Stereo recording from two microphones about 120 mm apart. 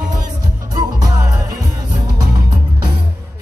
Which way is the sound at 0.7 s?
30° right (ahead or behind).